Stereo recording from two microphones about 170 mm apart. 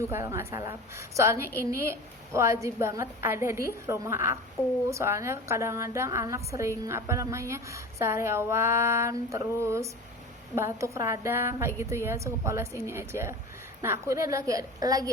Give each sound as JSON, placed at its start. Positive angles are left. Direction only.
{"t": 0.1, "sound": "a woman's voice", "side_deg": -15}